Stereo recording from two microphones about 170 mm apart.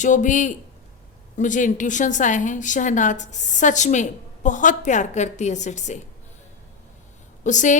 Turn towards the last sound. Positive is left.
turn(degrees=45)  # may be behind; listen again after turning